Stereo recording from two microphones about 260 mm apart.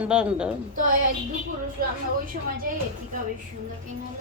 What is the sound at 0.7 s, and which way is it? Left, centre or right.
Speech, right.